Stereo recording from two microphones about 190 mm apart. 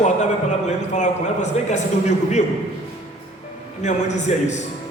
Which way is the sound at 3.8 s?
40° left (ahead or behind).